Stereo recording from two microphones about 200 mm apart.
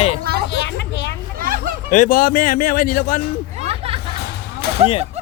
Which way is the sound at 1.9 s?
40° left (ahead or behind).